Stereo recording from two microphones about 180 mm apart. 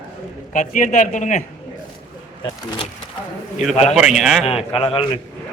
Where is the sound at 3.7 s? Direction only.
35° left (ahead or behind).